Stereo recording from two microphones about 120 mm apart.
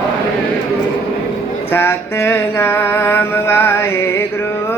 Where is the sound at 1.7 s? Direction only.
20° left (ahead or behind).